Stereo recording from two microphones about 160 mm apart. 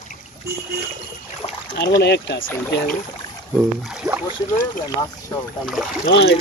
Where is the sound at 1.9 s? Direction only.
90° left.